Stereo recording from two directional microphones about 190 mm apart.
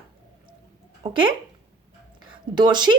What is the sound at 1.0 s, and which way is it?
Speech, 25° right (ahead or behind).